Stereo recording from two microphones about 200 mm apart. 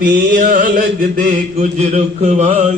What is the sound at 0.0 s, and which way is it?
Mantra, 45° right (ahead or behind).